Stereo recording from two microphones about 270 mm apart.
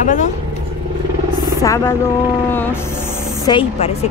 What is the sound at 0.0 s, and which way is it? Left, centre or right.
Speech, left.